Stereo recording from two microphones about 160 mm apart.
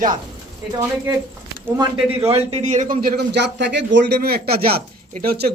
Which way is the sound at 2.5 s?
45° right (ahead or behind).